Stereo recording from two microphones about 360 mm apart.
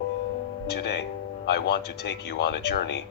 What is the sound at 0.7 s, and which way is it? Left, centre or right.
Speech, left.